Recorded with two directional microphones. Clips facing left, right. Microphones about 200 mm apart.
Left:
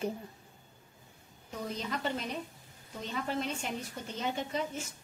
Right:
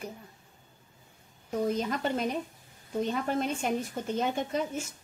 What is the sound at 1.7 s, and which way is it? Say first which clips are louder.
Speech: right 5 dB; 50° right (ahead or behind).